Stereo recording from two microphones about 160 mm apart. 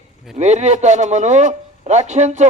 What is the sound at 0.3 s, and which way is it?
A man's voice, 45° right (ahead or behind).